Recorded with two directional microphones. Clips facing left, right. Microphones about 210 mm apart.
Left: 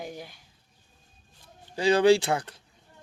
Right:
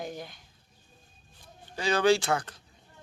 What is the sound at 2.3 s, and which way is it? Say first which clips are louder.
Speech: left 1 dB; 20° left (ahead or behind).